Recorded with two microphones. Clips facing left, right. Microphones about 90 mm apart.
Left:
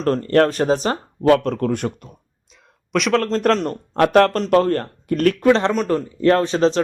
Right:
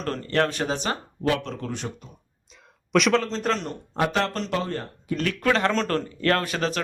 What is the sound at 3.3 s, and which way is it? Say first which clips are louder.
A man's voice: left 8 dB; 50° left (ahead or behind).